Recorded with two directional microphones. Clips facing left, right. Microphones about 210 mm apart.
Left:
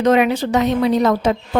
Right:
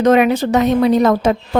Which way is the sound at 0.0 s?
50° right (ahead or behind).